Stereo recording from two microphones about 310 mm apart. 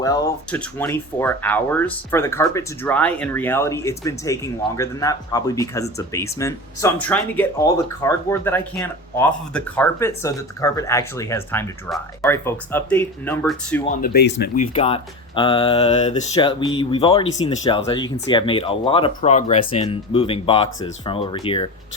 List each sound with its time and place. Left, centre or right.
0.0 s speech: centre
14.0 s speech: left
14.7 s speech: centre